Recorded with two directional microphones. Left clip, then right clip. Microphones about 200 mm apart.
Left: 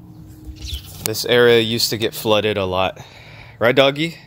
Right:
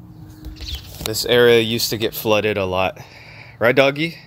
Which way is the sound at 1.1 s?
Centre (ahead or behind).